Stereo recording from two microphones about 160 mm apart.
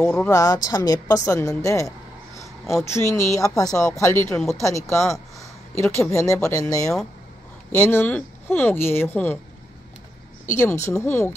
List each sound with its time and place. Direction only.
0.0 s speech: 5° left (ahead or behind)
0.3 s a woman's voice: 20° left (ahead or behind)
7.7 s speech: 15° left (ahead or behind)
10.5 s speech: 15° left (ahead or behind)